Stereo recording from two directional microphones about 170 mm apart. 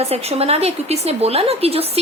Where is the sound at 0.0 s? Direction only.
35° right (ahead or behind).